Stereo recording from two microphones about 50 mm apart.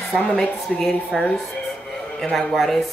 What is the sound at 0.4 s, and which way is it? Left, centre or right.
Speech, centre.